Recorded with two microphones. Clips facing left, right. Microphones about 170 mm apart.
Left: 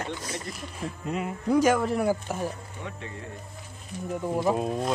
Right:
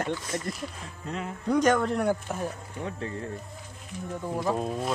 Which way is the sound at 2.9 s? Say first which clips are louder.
Right 5 dB; 35° right (ahead or behind).